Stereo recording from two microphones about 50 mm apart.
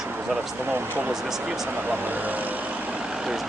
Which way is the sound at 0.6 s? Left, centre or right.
Right.